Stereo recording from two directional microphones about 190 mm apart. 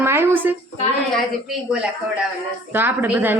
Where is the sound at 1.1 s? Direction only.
5° right (ahead or behind).